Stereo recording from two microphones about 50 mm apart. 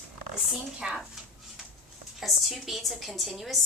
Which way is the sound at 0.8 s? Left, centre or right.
Centre.